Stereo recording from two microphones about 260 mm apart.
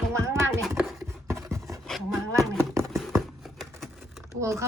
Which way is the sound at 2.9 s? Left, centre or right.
Centre.